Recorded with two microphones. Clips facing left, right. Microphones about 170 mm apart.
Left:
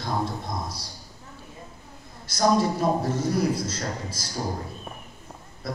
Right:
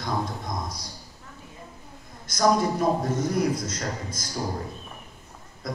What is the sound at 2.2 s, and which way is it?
A man's voice, 30° left (ahead or behind).